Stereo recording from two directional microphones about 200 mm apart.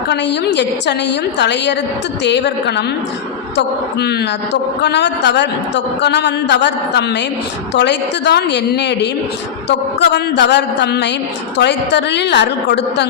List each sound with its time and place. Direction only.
0.1 s a man's voice: 60° left (ahead or behind)